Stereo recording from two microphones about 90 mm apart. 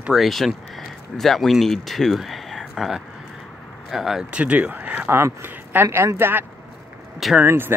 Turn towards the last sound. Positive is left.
turn(degrees=-25)  # may be behind; listen again after turning